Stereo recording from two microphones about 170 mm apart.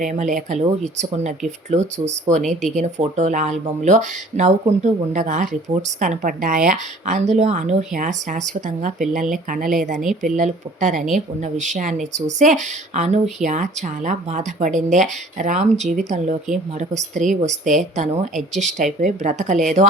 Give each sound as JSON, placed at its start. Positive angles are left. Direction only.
{"t": 0.0, "sound": "speech", "side_deg": -45}